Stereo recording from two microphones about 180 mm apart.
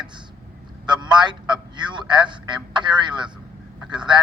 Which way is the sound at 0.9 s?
25° right (ahead or behind).